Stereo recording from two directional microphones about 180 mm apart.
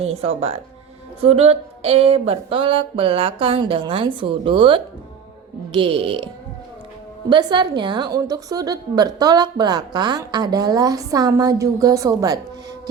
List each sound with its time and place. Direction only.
0.0 s a sound: 35° right (ahead or behind)
5.7 s a woman's voice: 30° right (ahead or behind)
7.3 s a woman's voice: 25° right (ahead or behind)